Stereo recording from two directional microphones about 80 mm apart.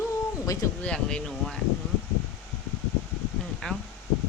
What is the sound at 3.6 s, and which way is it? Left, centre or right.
Speech, centre.